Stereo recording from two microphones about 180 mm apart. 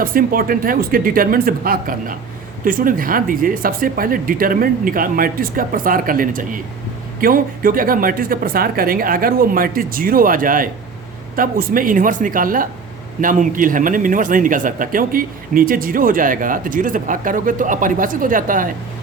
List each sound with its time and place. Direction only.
0.0 s speech: 55° right (ahead or behind)